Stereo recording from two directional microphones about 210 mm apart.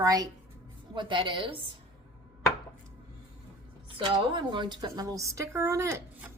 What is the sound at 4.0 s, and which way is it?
A woman's voice, 25° right (ahead or behind).